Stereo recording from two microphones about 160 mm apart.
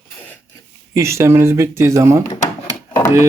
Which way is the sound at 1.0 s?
15° right (ahead or behind).